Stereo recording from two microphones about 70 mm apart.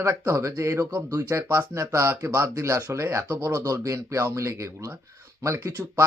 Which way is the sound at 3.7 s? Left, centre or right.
Right.